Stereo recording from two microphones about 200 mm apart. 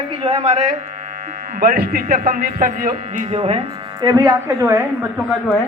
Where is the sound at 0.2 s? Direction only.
30° right (ahead or behind).